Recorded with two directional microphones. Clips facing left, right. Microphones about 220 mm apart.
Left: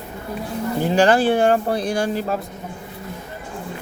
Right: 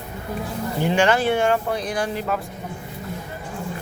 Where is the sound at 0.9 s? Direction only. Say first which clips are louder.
Left 3 dB; 35° left (ahead or behind).